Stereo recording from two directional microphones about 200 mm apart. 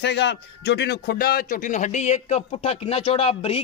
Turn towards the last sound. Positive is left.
turn(degrees=30)  # may be behind; listen again after turning